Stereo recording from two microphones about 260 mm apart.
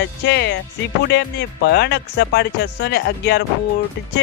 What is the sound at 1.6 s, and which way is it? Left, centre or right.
Speech, left.